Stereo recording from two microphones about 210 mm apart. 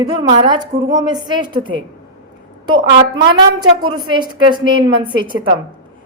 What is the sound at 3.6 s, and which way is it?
A woman's voice, 20° right (ahead or behind).